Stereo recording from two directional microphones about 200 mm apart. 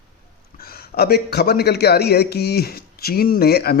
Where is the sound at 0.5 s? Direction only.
50° left (ahead or behind).